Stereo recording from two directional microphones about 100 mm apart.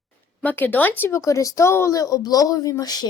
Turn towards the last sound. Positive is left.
turn(degrees=40)  # may be behind; listen again after turning